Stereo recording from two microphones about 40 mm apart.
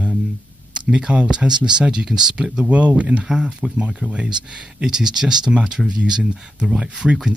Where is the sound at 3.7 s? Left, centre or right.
Right.